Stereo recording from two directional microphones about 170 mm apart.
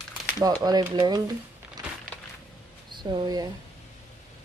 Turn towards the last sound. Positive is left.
turn(degrees=-25)  # may be behind; listen again after turning